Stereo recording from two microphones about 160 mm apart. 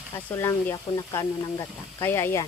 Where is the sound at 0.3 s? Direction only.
15° left (ahead or behind).